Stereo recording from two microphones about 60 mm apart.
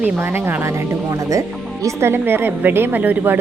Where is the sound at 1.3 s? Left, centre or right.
Right.